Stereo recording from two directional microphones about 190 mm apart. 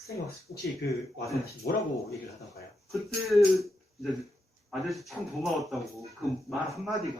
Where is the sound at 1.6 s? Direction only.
55° left (ahead or behind).